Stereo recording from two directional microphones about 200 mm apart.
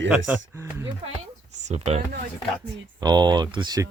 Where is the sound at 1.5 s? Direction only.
35° right (ahead or behind).